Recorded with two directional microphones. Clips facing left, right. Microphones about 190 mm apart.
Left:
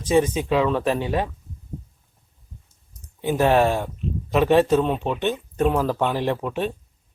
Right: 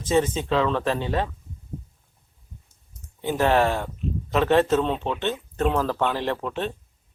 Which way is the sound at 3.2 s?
15° left (ahead or behind).